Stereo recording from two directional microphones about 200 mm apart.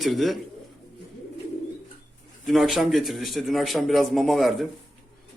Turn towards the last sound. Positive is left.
turn(degrees=0)  # may be behind; listen again after turning